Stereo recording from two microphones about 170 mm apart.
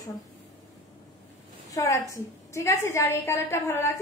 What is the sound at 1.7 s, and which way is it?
A woman's voice, 20° left (ahead or behind).